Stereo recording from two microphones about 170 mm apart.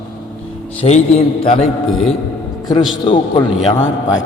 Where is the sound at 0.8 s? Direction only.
40° left (ahead or behind).